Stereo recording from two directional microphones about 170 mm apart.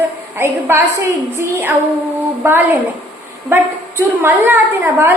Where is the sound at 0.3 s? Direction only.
15° right (ahead or behind).